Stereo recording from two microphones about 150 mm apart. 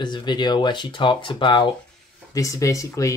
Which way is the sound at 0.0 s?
30° left (ahead or behind).